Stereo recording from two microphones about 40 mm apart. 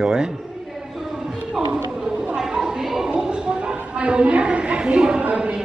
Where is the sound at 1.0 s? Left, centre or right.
Centre.